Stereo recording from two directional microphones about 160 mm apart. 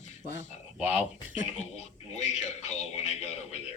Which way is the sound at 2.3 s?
45° left (ahead or behind).